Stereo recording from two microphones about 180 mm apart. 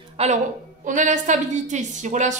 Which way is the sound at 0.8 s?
45° right (ahead or behind).